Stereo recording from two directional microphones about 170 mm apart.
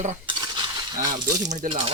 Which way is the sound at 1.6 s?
50° right (ahead or behind).